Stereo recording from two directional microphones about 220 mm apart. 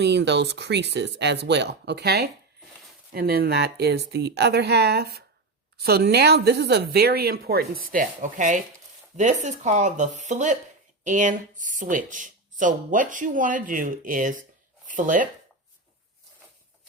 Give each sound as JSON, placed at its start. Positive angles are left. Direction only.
{"t": 0.0, "sound": "a woman's voice", "side_deg": -50}